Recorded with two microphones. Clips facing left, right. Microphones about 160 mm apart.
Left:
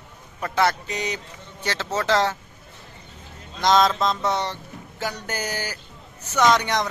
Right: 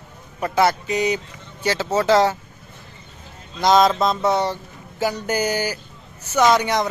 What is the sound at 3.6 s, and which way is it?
Speech, 10° right (ahead or behind).